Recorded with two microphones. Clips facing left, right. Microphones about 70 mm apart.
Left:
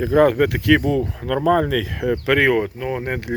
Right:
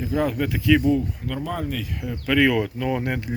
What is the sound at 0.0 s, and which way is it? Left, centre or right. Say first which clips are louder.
Speech: left 9 dB; left.